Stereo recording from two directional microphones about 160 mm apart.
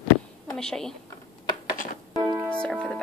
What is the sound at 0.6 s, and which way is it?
Speech, 5° left (ahead or behind).